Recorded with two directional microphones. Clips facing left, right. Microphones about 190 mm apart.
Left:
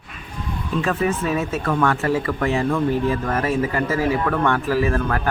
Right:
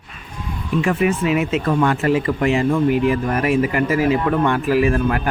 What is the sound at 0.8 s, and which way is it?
Speech, 15° right (ahead or behind).